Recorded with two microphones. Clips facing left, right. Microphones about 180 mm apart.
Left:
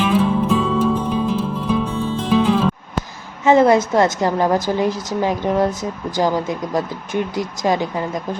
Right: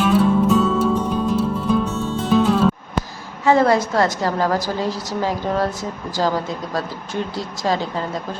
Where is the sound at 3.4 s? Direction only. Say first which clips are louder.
Left 3 dB; 20° left (ahead or behind).